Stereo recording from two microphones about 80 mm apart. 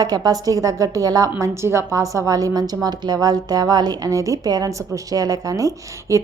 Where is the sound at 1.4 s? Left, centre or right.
Right.